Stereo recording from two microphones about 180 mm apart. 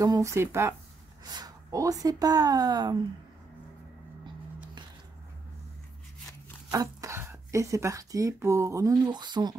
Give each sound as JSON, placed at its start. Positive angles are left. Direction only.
{"t": 0.0, "sound": "speech", "side_deg": -20}
{"t": 6.7, "sound": "speech", "side_deg": -20}